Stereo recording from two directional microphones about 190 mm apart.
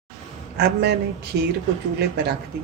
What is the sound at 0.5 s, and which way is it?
Speech, 60° right (ahead or behind).